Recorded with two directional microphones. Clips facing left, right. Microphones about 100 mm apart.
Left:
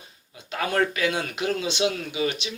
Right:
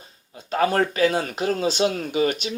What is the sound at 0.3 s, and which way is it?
Speech, 35° right (ahead or behind).